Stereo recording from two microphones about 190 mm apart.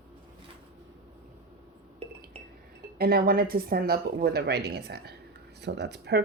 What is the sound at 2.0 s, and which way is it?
Glass, 30° right (ahead or behind).